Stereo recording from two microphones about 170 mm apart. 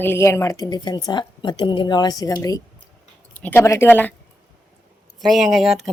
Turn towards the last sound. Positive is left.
turn(degrees=0)  # may be behind; listen again after turning